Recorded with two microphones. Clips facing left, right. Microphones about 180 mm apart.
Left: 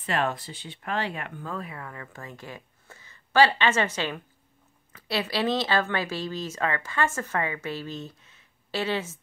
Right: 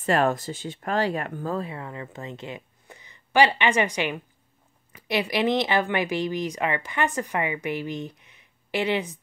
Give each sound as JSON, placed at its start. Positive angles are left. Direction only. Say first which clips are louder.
{"t": 0.0, "sound": "speech", "louder": "right 6 dB", "side_deg": -45}